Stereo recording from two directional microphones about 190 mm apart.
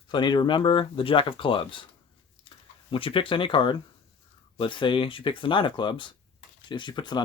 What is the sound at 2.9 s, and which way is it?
Speech, 30° left (ahead or behind).